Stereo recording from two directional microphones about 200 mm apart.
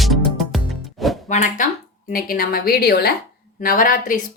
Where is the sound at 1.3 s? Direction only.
40° left (ahead or behind).